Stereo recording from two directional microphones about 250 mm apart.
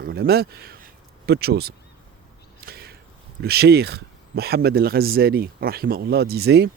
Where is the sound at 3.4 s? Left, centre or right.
Right.